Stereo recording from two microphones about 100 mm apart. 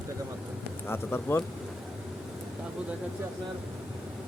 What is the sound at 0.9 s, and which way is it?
Speech, 25° left (ahead or behind).